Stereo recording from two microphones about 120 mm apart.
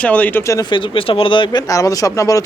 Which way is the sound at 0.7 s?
40° left (ahead or behind).